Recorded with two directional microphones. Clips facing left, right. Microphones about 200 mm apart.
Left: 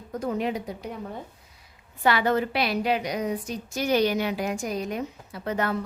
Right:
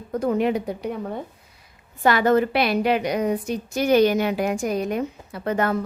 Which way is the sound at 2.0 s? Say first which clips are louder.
Right 5 dB; 45° right (ahead or behind).